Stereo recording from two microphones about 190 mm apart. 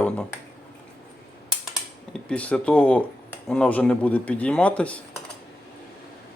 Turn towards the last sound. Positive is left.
turn(degrees=5)  # may be behind; listen again after turning